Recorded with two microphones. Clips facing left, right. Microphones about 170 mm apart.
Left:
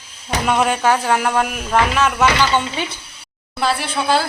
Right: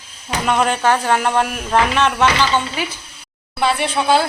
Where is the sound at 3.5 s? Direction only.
Centre (ahead or behind).